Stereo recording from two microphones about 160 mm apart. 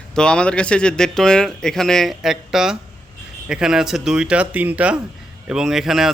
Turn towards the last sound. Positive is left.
turn(degrees=0)  # may be behind; listen again after turning